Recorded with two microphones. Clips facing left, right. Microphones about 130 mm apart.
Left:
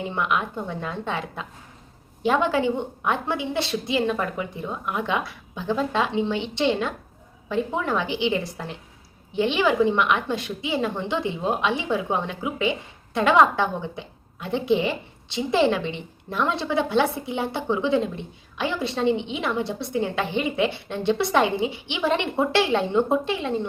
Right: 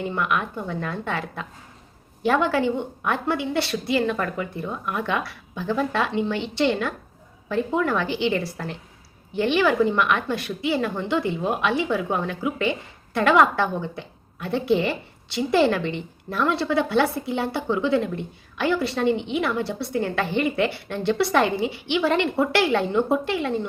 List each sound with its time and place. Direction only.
0.1 s a woman's voice: 20° left (ahead or behind)